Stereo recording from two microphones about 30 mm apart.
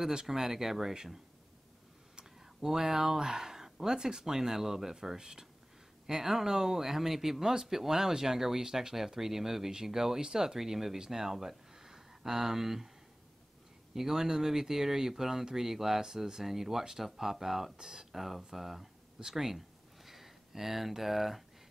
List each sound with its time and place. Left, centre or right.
0.0 s speech: right
0.3 s speech: centre
2.6 s speech: centre
13.9 s speech: centre